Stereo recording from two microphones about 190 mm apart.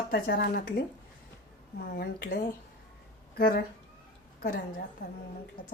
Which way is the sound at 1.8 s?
55° left (ahead or behind).